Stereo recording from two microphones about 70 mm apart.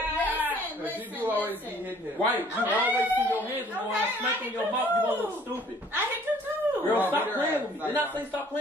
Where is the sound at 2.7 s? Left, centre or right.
Right.